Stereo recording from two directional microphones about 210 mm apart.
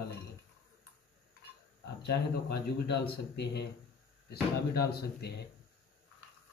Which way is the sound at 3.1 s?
55° left (ahead or behind).